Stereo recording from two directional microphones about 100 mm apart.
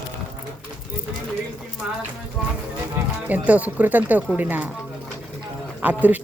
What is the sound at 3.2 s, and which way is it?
Speech, 15° right (ahead or behind).